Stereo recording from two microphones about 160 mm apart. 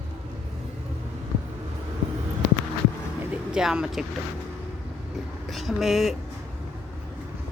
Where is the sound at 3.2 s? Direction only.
5° right (ahead or behind).